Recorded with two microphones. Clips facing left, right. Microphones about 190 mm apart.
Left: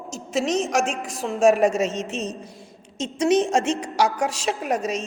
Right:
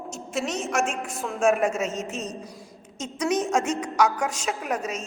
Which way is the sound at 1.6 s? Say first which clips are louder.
Left 5 dB; 85° left.